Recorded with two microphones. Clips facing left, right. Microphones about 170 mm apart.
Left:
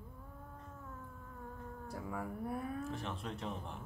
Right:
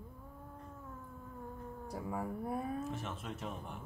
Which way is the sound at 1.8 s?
20° right (ahead or behind).